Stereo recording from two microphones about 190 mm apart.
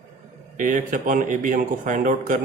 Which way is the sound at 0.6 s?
45° right (ahead or behind).